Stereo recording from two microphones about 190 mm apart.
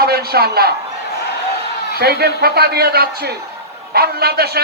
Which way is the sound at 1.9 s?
55° right (ahead or behind).